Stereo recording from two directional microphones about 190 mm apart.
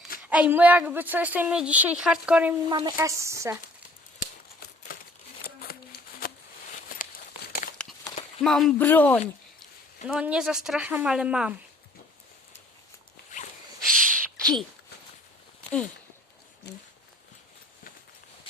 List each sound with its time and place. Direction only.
0.2 s a woman's voice: 5° right (ahead or behind)
2.6 s a woman's voice: 20° right (ahead or behind)
4.9 s crumpling: 50° left (ahead or behind)
5.6 s shuffling cards: 50° left (ahead or behind)
7.8 s a sound: 5° left (ahead or behind)
8.4 s speech: centre (ahead or behind)
10.1 s speech: 5° right (ahead or behind)
13.8 s a sound: 45° right (ahead or behind)
14.3 s a sound: 5° left (ahead or behind)
16.7 s speech: 60° left (ahead or behind)